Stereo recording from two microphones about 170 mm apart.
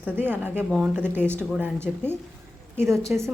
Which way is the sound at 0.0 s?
10° right (ahead or behind).